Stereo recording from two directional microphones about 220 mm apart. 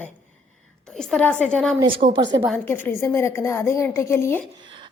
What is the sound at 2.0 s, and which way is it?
Speech, 30° right (ahead or behind).